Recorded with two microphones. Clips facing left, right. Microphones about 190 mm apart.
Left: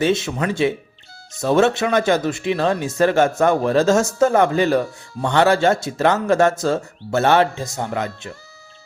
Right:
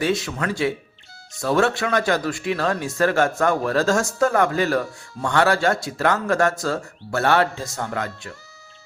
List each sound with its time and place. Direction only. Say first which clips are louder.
0.0 s speech: left 4 dB; 25° left (ahead or behind)